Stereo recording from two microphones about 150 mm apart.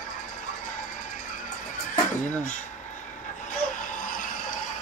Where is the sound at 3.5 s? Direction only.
60° left (ahead or behind).